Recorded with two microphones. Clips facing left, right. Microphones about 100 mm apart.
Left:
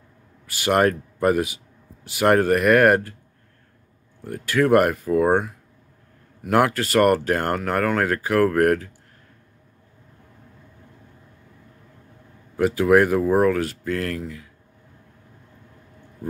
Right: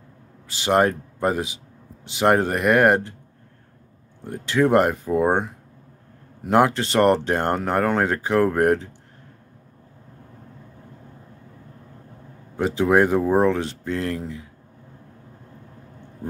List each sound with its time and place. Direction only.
0.5 s speech: 20° right (ahead or behind)
4.2 s speech: 20° right (ahead or behind)
6.5 s speech: 20° right (ahead or behind)
12.5 s speech: 25° right (ahead or behind)